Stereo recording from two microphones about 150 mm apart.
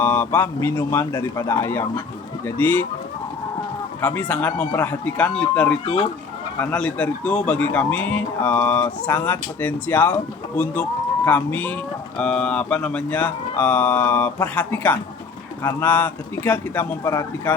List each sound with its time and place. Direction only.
0.0 s speech: 15° left (ahead or behind)
4.0 s speech: 10° left (ahead or behind)
5.8 s speech: 40° left (ahead or behind)
6.6 s speech: 10° left (ahead or behind)
11.3 s a man's voice: 10° left (ahead or behind)